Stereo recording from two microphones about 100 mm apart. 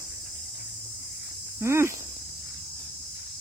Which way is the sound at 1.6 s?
25° right (ahead or behind).